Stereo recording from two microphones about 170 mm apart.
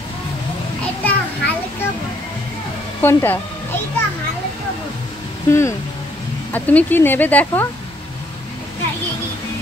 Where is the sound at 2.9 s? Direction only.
10° left (ahead or behind).